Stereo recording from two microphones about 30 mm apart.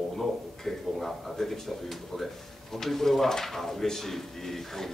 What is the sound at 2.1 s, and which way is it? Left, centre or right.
Speech, left.